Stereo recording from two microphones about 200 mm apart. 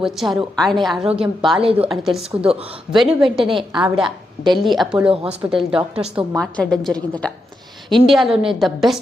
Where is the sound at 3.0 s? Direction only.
Centre (ahead or behind).